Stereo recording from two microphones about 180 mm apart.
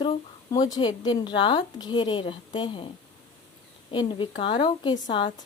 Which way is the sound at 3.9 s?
25° left (ahead or behind).